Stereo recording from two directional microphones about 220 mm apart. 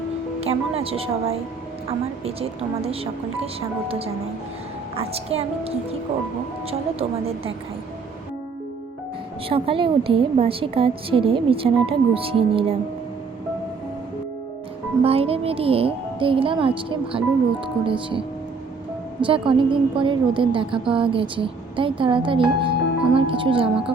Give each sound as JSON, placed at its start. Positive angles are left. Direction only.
{"t": 0.3, "sound": "a woman's voice", "side_deg": -25}
{"t": 9.5, "sound": "a woman's voice", "side_deg": -25}
{"t": 15.0, "sound": "a woman's voice", "side_deg": -25}
{"t": 19.2, "sound": "a woman's voice", "side_deg": -25}